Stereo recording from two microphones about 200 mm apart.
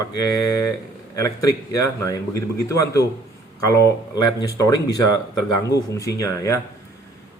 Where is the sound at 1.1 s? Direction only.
15° left (ahead or behind).